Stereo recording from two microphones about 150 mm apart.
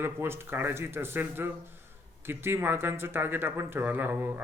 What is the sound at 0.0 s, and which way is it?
Speech, 15° right (ahead or behind).